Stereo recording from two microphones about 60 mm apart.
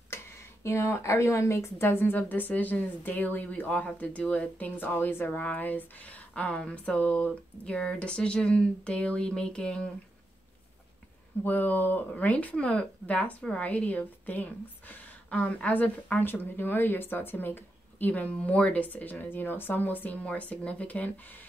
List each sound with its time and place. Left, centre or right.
0.7 s a woman's voice: left; by 9.8 s centre
11.4 s a woman's voice: left
20.2 s a woman's voice: left